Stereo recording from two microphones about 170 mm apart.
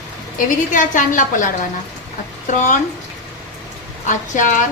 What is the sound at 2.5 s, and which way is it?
Speech, 45° left (ahead or behind).